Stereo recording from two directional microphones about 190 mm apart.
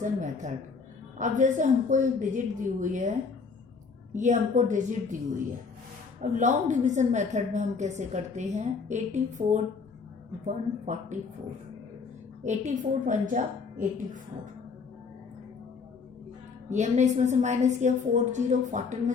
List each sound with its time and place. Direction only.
0.0 s a woman's voice: 40° right (ahead or behind)
4.1 s a woman's voice: 40° right (ahead or behind)
6.3 s a woman's voice: 40° right (ahead or behind)
12.4 s a woman's voice: 40° right (ahead or behind)
16.6 s a woman's voice: 40° right (ahead or behind)